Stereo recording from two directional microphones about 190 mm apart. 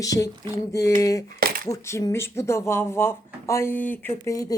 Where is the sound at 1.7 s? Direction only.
15° left (ahead or behind).